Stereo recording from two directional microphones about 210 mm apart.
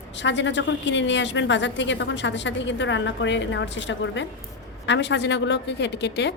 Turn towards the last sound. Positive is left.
turn(degrees=55)  # may be behind; listen again after turning